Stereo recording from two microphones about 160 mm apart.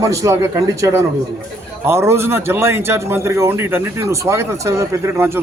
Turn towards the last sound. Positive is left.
turn(degrees=-15)  # may be behind; listen again after turning